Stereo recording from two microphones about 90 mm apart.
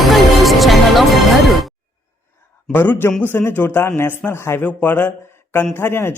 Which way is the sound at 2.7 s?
20° left (ahead or behind).